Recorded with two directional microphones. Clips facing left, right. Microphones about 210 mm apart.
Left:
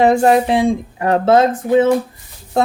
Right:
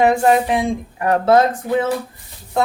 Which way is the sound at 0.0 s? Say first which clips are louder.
Left 2 dB; 30° left (ahead or behind).